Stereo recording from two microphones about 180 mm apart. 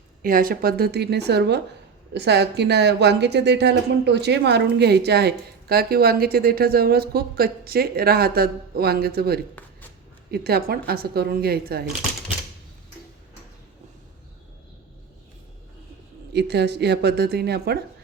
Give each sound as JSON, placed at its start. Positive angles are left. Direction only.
{"t": 0.2, "sound": "a woman's voice", "side_deg": -50}
{"t": 16.3, "sound": "speech", "side_deg": -70}